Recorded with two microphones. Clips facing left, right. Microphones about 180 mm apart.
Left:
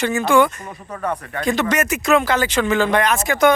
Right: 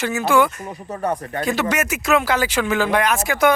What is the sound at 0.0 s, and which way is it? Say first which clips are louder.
Speech: left 2 dB; 5° right (ahead or behind).